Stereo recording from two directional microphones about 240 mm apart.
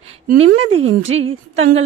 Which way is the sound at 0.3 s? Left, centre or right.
Right.